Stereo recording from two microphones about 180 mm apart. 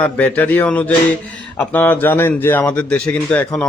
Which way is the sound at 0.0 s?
10° left (ahead or behind).